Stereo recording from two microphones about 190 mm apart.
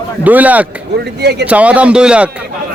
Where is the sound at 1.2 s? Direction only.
60° right (ahead or behind).